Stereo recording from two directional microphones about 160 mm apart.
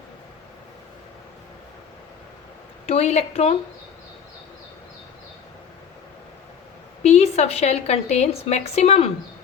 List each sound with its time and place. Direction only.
2.8 s a woman's voice: 40° left (ahead or behind)
7.0 s a woman's voice: 40° left (ahead or behind)